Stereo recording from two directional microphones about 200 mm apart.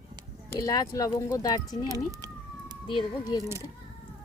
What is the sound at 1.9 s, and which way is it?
Cat, 15° right (ahead or behind).